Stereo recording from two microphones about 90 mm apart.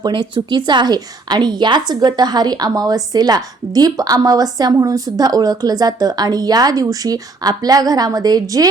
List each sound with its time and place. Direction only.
0.0 s a woman's voice: 60° right (ahead or behind); by 8.6 s 45° right (ahead or behind)